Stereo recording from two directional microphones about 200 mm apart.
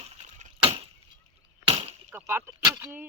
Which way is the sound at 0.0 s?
35° right (ahead or behind).